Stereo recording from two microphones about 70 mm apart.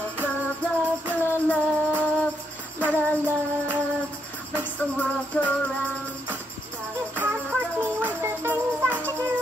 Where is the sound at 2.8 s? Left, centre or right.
Right.